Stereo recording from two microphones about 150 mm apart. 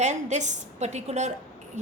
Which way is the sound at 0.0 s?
50° right (ahead or behind).